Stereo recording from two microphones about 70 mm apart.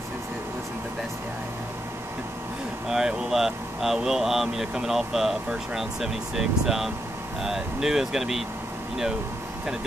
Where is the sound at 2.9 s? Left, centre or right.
Centre.